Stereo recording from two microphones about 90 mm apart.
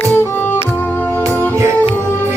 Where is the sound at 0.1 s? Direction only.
20° left (ahead or behind).